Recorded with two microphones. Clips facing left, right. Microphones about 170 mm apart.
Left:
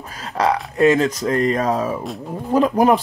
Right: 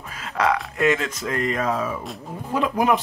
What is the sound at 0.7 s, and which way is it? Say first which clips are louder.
Speech: left 6 dB; 35° left (ahead or behind).